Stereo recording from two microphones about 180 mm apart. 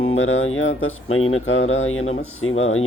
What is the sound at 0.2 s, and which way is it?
Speech, 90° left.